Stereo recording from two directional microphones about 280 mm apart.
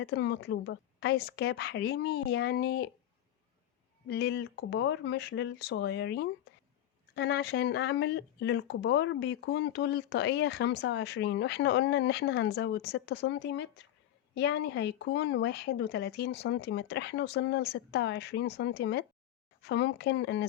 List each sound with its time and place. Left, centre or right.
0.0 s speech: left
4.1 s speech: left